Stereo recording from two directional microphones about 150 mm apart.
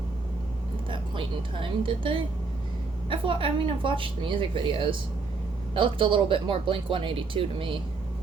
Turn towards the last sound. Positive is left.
turn(degrees=-35)  # may be behind; listen again after turning